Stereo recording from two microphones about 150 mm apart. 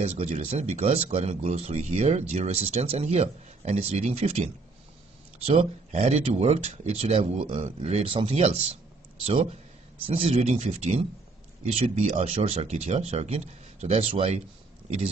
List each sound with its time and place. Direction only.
0.0 s speech: 45° right (ahead or behind)